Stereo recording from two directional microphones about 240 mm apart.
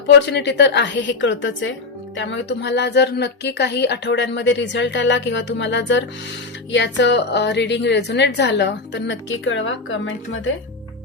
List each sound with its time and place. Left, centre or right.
0.3 s a woman's voice: left